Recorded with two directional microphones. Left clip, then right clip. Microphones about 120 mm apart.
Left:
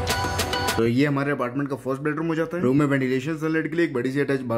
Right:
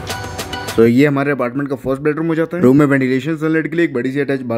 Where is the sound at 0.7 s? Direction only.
65° right (ahead or behind); by 3.9 s 40° right (ahead or behind).